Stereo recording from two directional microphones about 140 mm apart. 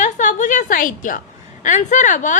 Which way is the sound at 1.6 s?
60° left (ahead or behind).